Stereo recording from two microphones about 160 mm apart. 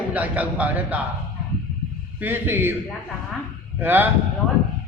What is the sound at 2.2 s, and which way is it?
Speech, 10° right (ahead or behind).